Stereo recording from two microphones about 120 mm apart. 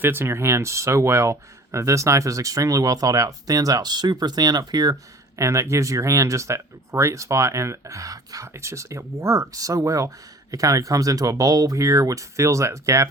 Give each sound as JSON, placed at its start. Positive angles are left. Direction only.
{"t": 0.0, "sound": "speech", "side_deg": -20}